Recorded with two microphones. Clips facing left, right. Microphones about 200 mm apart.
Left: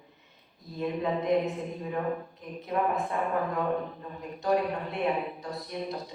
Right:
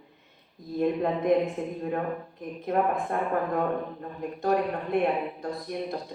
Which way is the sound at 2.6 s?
55° right (ahead or behind).